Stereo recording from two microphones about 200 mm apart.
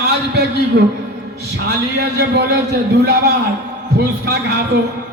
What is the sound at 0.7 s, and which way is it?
A man's voice, 55° right (ahead or behind).